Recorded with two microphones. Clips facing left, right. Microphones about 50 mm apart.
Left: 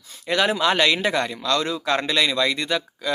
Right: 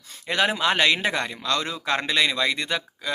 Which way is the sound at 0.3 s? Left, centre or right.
Centre.